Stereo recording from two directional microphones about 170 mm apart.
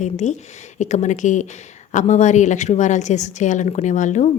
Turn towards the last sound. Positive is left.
turn(degrees=45)  # may be behind; listen again after turning